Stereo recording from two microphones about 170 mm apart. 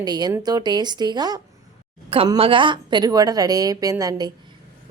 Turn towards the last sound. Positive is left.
turn(degrees=-25)  # may be behind; listen again after turning